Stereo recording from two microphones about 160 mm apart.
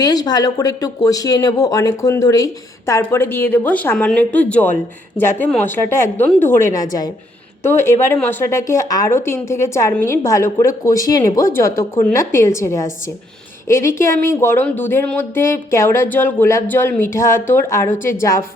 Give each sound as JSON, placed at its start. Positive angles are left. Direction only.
{"t": 0.0, "sound": "speech", "side_deg": 25}